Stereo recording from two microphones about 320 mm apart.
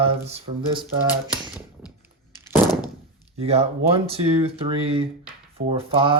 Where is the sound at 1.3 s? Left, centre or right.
Centre.